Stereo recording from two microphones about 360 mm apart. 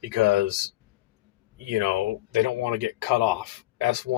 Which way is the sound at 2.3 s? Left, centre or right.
Right.